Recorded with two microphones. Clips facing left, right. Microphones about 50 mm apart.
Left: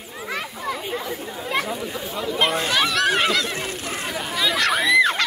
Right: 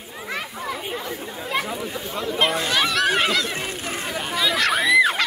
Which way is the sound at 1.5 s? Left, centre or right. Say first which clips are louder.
Left 1 dB; centre.